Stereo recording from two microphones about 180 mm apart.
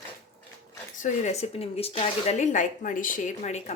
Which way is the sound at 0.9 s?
45° left (ahead or behind).